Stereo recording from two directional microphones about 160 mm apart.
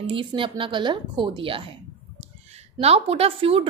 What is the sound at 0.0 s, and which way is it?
A woman's voice, 30° right (ahead or behind).